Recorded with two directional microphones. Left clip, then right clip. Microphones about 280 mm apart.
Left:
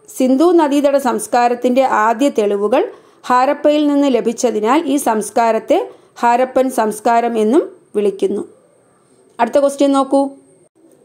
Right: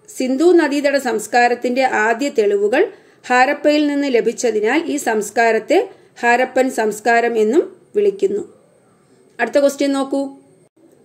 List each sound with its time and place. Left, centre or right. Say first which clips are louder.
0.1 s a woman's voice: left 2 dB; centre